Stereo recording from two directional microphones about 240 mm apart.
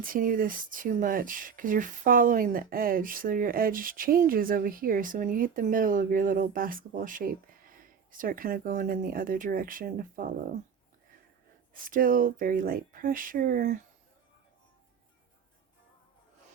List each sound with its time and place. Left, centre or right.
0.0 s speech: right
11.7 s speech: right